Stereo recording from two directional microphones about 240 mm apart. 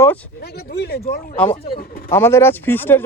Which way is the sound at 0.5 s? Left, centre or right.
Left.